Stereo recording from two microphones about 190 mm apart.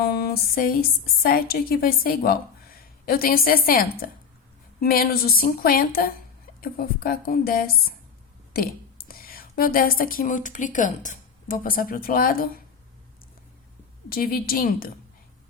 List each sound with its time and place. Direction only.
0.0 s a sound: 55° left (ahead or behind)
1.2 s a woman's voice: 50° left (ahead or behind)
14.1 s a woman's voice: 50° left (ahead or behind)